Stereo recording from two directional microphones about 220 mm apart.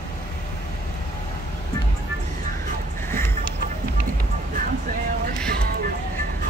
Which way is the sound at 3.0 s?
10° left (ahead or behind).